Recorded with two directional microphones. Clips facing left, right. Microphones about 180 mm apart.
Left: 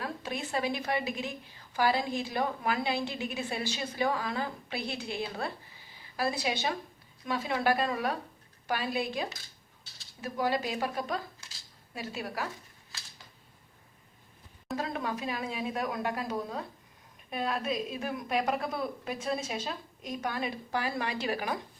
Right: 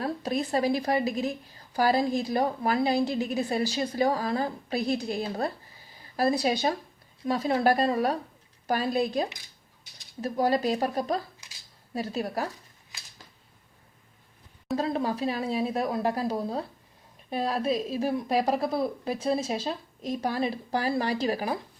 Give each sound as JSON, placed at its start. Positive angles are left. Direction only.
{"t": 0.0, "sound": "a woman's voice", "side_deg": -40}
{"t": 14.8, "sound": "a woman's voice", "side_deg": -35}